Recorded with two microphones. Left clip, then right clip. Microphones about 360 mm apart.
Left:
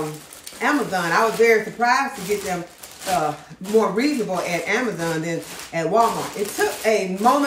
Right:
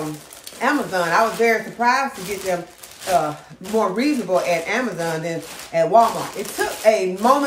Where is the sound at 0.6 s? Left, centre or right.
Centre.